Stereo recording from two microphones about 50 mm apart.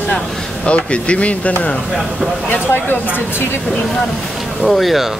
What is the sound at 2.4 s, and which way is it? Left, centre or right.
Speech, left.